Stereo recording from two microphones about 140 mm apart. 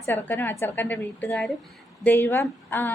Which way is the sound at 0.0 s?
15° left (ahead or behind).